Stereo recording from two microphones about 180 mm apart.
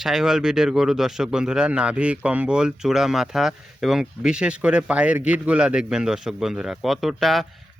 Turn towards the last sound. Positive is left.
turn(degrees=0)  # may be behind; listen again after turning